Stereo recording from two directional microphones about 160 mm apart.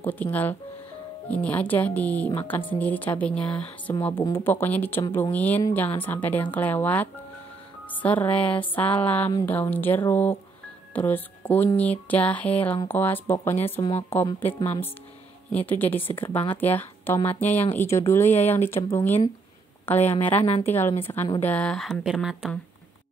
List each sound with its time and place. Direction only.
0.0 s speech: 10° left (ahead or behind)
15.5 s speech: 10° left (ahead or behind)